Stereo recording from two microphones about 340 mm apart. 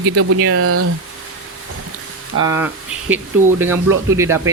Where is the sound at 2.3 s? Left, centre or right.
Right.